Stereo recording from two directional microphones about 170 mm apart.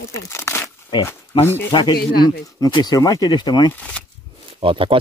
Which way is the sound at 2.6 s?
25° left (ahead or behind).